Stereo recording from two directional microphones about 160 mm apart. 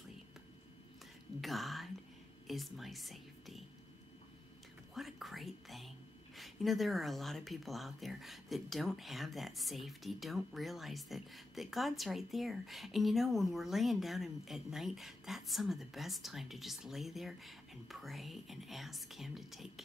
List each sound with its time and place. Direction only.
1.4 s speech: centre (ahead or behind)
4.9 s speech: centre (ahead or behind)